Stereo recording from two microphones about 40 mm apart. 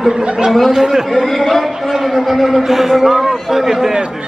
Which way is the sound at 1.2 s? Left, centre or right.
Centre.